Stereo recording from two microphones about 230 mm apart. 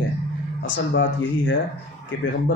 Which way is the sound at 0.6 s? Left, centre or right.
Left.